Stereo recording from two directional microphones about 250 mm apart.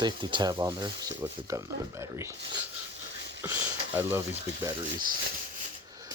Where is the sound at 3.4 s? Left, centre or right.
Centre.